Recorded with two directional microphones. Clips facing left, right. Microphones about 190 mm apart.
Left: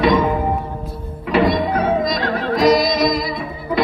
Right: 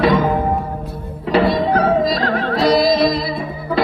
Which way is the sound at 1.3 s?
30° right (ahead or behind).